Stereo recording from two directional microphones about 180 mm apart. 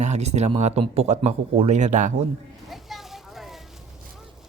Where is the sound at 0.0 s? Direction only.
40° right (ahead or behind).